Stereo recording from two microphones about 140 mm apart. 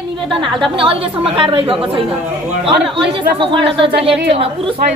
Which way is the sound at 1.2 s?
40° right (ahead or behind).